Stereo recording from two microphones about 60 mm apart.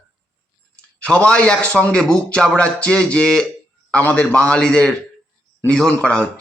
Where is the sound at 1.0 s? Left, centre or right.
Centre.